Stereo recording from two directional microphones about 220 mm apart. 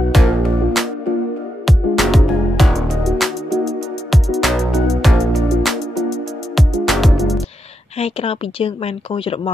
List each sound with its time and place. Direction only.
0.1 s music: centre (ahead or behind)
8.0 s speech: 25° left (ahead or behind)